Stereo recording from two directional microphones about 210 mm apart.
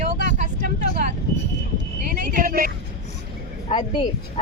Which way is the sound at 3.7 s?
25° left (ahead or behind).